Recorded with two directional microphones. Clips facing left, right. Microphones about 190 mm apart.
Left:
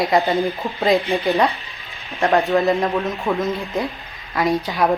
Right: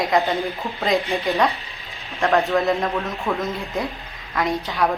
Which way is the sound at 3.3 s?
Centre (ahead or behind).